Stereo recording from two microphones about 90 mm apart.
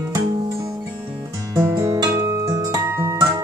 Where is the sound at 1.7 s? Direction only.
30° right (ahead or behind).